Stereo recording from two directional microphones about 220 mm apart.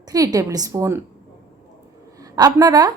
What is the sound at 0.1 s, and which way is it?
Speech, 15° right (ahead or behind).